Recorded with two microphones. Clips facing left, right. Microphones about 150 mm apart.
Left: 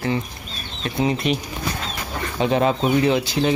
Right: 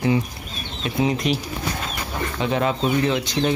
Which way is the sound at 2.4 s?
25° left (ahead or behind).